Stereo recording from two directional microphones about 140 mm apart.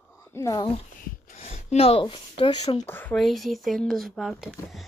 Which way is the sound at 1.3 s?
45° left (ahead or behind).